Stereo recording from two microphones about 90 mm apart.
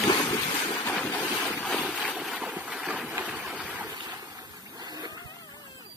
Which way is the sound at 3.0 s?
15° right (ahead or behind).